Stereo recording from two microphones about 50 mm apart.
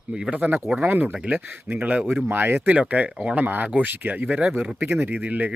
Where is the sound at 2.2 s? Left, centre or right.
Right.